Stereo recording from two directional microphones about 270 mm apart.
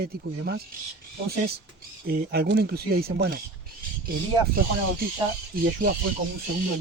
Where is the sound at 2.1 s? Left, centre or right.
Right.